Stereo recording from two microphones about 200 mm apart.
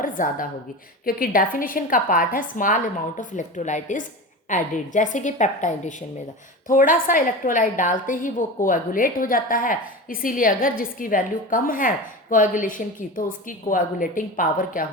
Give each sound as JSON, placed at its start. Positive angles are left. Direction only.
{"t": 0.0, "sound": "a woman's voice", "side_deg": 45}